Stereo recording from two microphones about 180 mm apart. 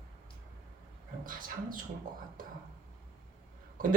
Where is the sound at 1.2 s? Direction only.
50° right (ahead or behind).